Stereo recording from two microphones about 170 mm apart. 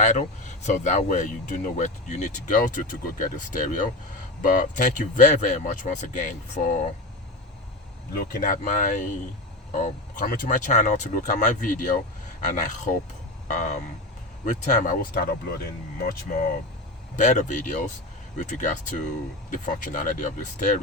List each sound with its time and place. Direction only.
0.0 s speech: 45° left (ahead or behind)
8.1 s speech: 60° left (ahead or behind)
17.2 s speech: 45° left (ahead or behind)